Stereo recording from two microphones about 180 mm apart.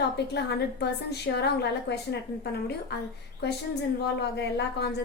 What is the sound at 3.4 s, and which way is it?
A woman's voice, 65° left (ahead or behind).